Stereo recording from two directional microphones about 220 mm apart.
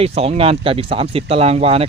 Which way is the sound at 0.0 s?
25° right (ahead or behind).